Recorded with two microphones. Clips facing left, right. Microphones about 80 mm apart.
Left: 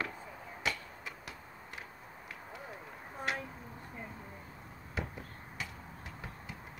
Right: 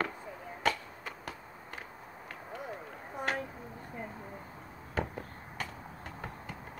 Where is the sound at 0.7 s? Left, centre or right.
Centre.